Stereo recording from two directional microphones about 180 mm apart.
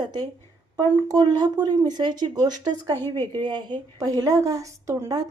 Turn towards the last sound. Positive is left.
turn(degrees=-20)  # may be behind; listen again after turning